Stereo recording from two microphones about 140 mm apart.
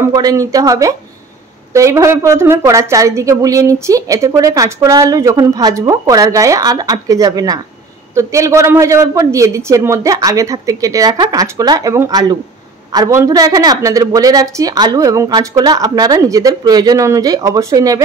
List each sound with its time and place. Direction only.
0.1 s a woman's voice: 25° right (ahead or behind)